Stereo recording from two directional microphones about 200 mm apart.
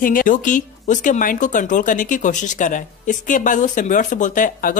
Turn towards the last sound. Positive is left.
turn(degrees=40)  # may be behind; listen again after turning